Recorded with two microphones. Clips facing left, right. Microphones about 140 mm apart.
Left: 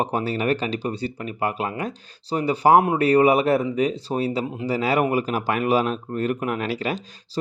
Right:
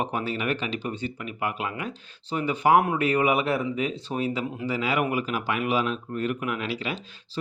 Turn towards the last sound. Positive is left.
turn(degrees=45)  # may be behind; listen again after turning